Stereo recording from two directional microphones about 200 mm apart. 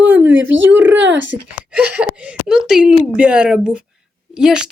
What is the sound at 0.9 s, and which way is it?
Speech, 65° right (ahead or behind).